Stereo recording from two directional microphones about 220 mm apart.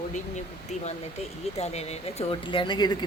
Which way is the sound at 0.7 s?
30° left (ahead or behind).